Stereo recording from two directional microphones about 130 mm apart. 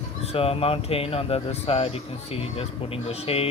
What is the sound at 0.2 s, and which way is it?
Speech, 50° left (ahead or behind).